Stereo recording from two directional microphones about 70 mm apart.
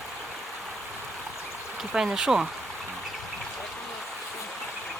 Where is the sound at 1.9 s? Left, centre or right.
Centre.